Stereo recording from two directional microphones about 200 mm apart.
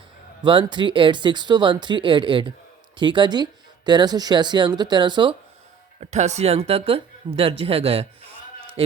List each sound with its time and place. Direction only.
0.4 s a woman's voice: 25° right (ahead or behind)
6.0 s a woman's voice: 35° right (ahead or behind)